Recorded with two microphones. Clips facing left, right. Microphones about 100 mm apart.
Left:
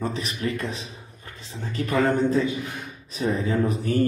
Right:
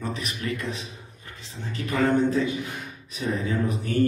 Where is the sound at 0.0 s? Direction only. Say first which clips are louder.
Left 3 dB; 30° left (ahead or behind).